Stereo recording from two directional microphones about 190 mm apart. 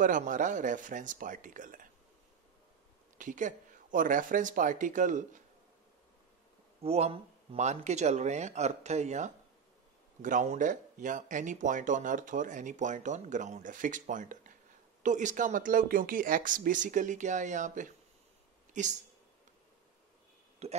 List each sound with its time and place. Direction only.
0.0 s speech: 45° right (ahead or behind)
3.2 s speech: 40° right (ahead or behind)
6.8 s speech: 30° right (ahead or behind)
20.6 s speech: 35° right (ahead or behind)